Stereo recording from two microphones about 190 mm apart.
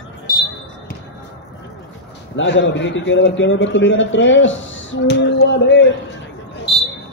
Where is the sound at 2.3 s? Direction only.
70° left (ahead or behind).